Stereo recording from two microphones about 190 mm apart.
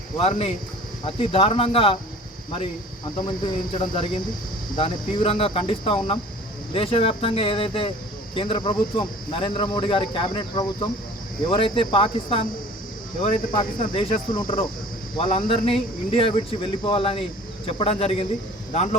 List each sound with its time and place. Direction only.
0.3 s speech: 30° left (ahead or behind)
3.2 s speech: 25° left (ahead or behind)
13.6 s speech: 25° left (ahead or behind)